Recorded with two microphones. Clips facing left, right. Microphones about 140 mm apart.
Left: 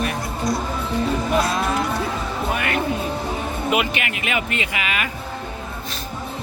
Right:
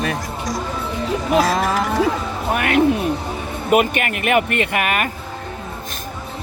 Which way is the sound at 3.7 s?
45° right (ahead or behind).